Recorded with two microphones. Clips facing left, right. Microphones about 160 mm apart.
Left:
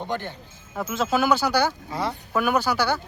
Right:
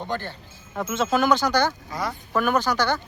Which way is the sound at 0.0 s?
15° left (ahead or behind).